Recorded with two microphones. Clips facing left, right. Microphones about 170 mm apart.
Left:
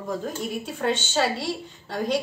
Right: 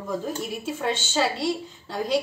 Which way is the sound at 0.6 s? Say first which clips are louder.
Left 1 dB; centre (ahead or behind).